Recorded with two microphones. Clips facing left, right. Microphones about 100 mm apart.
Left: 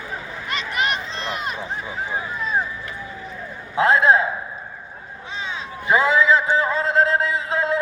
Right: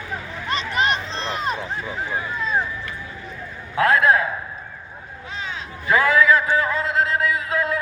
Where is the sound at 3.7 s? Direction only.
25° left (ahead or behind).